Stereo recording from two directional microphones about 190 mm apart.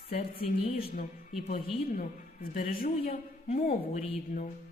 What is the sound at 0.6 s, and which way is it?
Speech, 30° left (ahead or behind).